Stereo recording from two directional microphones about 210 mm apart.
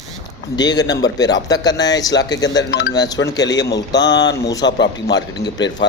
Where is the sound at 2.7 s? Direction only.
45° left (ahead or behind).